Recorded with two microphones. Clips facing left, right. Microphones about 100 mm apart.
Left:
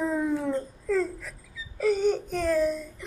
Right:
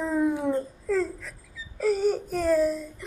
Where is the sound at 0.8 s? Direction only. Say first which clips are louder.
Left 1 dB; centre (ahead or behind).